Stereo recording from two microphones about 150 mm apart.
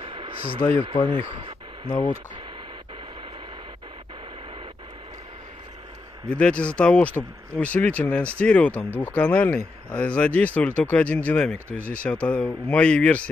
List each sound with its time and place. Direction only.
0.0 s a sound: 35° right (ahead or behind)
0.6 s speech: 15° left (ahead or behind)
1.1 s speech: 35° right (ahead or behind)
6.2 s speech: 5° left (ahead or behind)